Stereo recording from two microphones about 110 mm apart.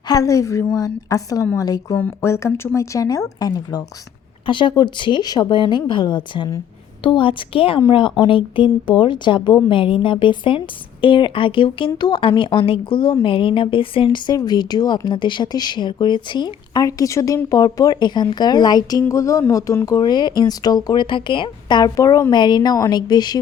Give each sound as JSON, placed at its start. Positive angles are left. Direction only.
{"t": 0.1, "sound": "a woman's voice", "side_deg": 30}
{"t": 2.0, "sound": "speech", "side_deg": 20}
{"t": 4.4, "sound": "a woman's voice", "side_deg": 50}
{"t": 22.3, "sound": "speech", "side_deg": 40}